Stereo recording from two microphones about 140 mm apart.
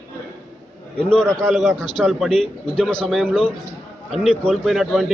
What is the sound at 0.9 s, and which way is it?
A man's voice, 5° left (ahead or behind).